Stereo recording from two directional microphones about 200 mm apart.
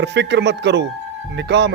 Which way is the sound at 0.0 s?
60° right (ahead or behind).